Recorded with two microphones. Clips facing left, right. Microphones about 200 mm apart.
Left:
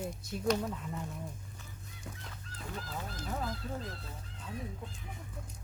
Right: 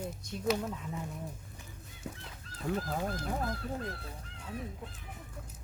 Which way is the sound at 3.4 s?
55° right (ahead or behind).